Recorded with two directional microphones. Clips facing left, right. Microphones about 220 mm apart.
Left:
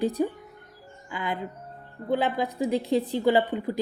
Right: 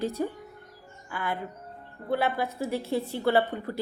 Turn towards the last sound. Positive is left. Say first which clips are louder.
# left 2 dB
turn(degrees=15)  # may be behind; listen again after turning